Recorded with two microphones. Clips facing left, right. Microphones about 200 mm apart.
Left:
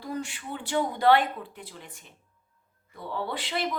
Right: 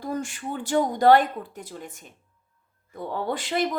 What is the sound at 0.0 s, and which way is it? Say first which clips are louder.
A woman's voice: right 4 dB; 45° right (ahead or behind).